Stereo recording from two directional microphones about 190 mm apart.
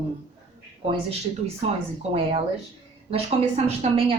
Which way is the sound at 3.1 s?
35° right (ahead or behind).